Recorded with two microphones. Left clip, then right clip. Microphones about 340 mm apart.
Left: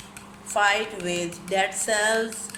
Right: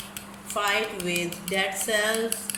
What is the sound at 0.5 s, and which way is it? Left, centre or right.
A woman's voice, left.